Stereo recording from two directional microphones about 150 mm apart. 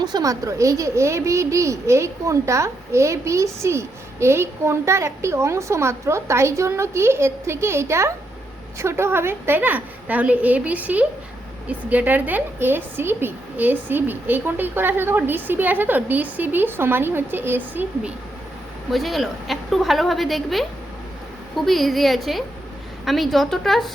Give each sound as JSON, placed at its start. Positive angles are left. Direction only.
{"t": 0.0, "sound": "a woman's voice", "side_deg": -25}
{"t": 18.9, "sound": "a woman's voice", "side_deg": 0}